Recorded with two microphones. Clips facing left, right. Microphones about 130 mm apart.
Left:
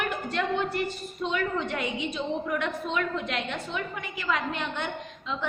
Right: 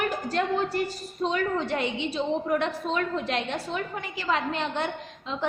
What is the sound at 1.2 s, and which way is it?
A woman's voice, 35° right (ahead or behind).